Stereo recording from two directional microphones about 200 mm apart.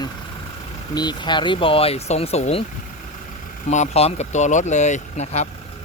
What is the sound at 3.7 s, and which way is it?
Speech, 35° left (ahead or behind).